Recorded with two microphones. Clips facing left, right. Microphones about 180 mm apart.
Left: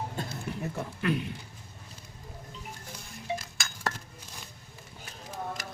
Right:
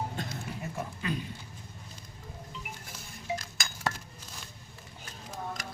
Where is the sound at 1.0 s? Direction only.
65° left (ahead or behind).